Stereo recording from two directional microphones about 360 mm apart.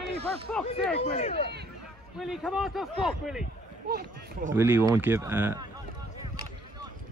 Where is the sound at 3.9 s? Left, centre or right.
Right.